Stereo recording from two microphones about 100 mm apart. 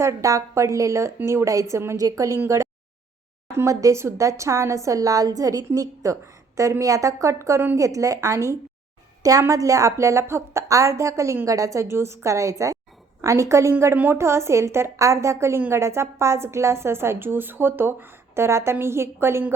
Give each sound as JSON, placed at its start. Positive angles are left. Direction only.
{"t": 0.0, "sound": "a woman's voice", "side_deg": -30}